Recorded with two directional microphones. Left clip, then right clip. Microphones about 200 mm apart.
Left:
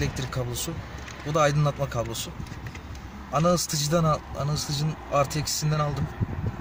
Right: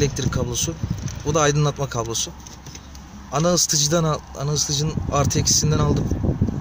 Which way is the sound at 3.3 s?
40° right (ahead or behind).